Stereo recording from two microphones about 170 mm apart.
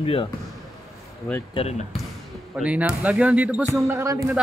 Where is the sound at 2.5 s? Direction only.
5° right (ahead or behind).